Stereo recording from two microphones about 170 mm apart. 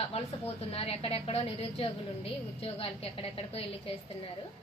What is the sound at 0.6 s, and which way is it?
A woman's voice, 35° left (ahead or behind).